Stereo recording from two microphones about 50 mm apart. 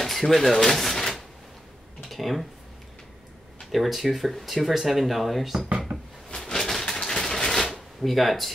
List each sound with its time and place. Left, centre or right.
0.0 s drawer open or close: centre
2.0 s speech: centre
3.7 s speech: centre
5.7 s a sound: right
6.3 s a sound: centre
8.0 s speech: centre